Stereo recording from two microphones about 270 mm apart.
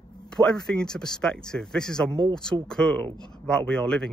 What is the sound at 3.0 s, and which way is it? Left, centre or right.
Speech, centre.